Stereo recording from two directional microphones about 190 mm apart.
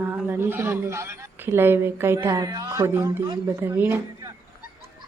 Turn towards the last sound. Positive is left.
turn(degrees=-15)  # may be behind; listen again after turning